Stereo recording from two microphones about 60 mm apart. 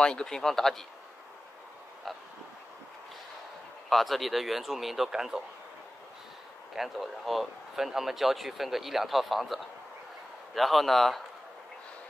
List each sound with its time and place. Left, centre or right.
0.0 s speech: centre
2.1 s speech: centre
3.9 s speech: centre
6.7 s speech: centre